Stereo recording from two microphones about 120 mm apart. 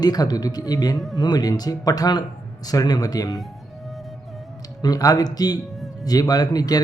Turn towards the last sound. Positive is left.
turn(degrees=30)  # may be behind; listen again after turning